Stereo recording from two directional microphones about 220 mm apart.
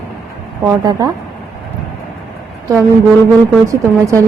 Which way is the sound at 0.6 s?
15° right (ahead or behind).